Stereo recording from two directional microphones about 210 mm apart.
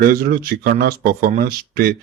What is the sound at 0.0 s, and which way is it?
Speech, 45° right (ahead or behind).